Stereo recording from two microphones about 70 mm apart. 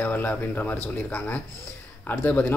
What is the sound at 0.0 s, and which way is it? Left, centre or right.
Speech, left.